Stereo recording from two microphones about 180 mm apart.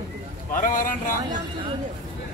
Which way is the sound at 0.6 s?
45° left (ahead or behind).